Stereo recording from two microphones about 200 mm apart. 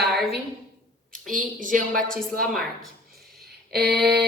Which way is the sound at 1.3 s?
40° right (ahead or behind).